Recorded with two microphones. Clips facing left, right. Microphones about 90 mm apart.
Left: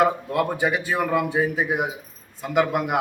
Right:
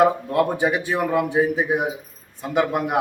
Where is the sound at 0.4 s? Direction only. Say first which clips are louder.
Right 2 dB; 20° right (ahead or behind).